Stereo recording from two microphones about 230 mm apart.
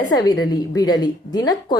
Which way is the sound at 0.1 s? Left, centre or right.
Centre.